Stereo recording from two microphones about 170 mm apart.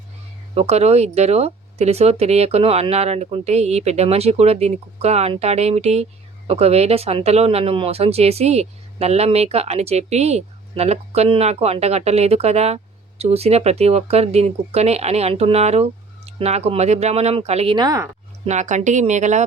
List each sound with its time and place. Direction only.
0.5 s speech: 40° right (ahead or behind)
17.7 s speech: 20° right (ahead or behind)
18.4 s speech: 45° right (ahead or behind)